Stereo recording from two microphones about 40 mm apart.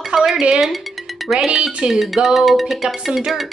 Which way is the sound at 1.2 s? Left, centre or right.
Centre.